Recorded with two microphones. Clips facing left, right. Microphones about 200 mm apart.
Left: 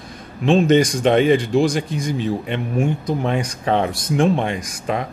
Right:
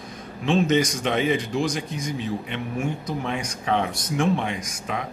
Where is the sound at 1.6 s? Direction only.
30° left (ahead or behind).